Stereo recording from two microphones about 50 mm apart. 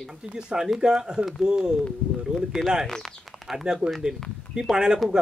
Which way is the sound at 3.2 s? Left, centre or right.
Centre.